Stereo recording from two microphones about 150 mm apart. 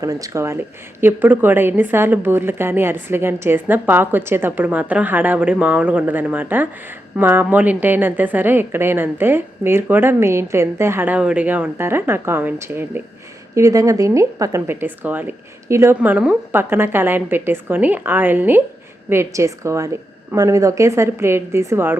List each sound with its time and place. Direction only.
0.0 s a woman's voice: 20° right (ahead or behind)